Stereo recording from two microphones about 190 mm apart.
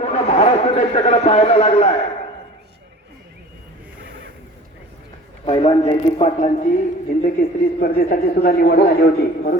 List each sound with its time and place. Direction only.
0.0 s a man's voice: 35° left (ahead or behind)
5.5 s speech: 30° left (ahead or behind); by 9.1 s 55° left (ahead or behind)